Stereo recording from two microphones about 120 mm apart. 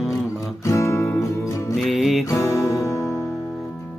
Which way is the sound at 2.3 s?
25° left (ahead or behind).